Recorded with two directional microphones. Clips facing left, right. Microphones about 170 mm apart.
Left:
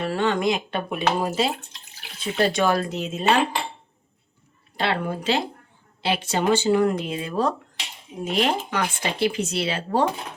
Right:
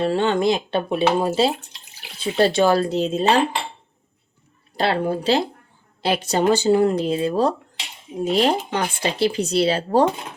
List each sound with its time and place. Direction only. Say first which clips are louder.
0.0 s speech: right 4 dB; 30° right (ahead or behind)
4.8 s speech: right 4 dB; 35° right (ahead or behind)